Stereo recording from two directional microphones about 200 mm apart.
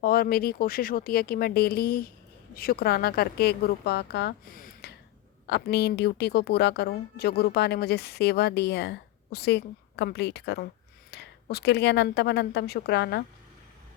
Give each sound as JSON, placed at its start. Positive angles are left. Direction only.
{"t": 0.0, "sound": "a woman's voice", "side_deg": 50}